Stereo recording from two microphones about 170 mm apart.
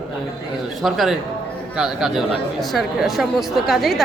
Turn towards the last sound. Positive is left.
turn(degrees=0)  # may be behind; listen again after turning